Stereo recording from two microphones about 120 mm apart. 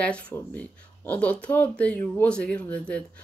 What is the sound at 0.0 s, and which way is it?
Speech, 10° left (ahead or behind).